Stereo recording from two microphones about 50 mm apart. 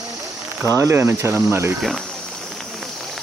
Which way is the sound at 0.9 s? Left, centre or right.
Right.